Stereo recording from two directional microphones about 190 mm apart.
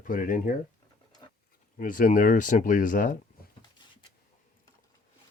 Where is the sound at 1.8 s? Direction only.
45° left (ahead or behind).